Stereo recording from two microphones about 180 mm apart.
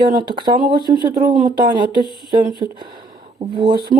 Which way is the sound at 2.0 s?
25° left (ahead or behind).